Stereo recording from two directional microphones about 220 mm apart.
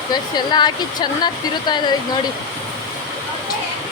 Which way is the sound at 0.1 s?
20° left (ahead or behind).